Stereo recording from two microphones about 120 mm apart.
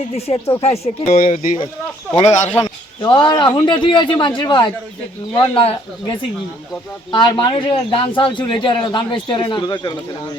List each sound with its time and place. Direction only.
0.1 s speech: 60° left (ahead or behind)
0.6 s speech: 75° left (ahead or behind)
3.0 s speech: 40° left (ahead or behind)